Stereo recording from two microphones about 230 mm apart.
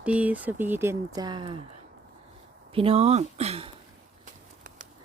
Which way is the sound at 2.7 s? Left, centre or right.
Right.